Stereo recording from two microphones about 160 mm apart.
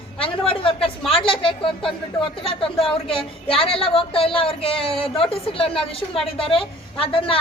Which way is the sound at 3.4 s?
35° left (ahead or behind).